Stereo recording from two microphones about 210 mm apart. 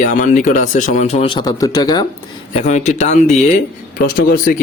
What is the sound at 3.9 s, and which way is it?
Speech, 45° left (ahead or behind).